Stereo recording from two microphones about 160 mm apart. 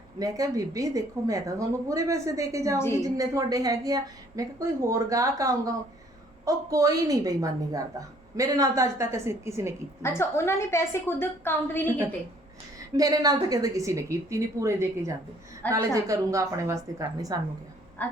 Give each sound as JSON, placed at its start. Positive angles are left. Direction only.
{"t": 0.2, "sound": "a woman's voice", "side_deg": -20}
{"t": 10.0, "sound": "a woman's voice", "side_deg": 15}
{"t": 13.0, "sound": "a woman's voice", "side_deg": -25}
{"t": 18.0, "sound": "a woman's voice", "side_deg": 10}